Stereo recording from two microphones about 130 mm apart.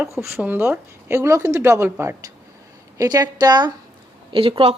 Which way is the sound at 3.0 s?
30° right (ahead or behind).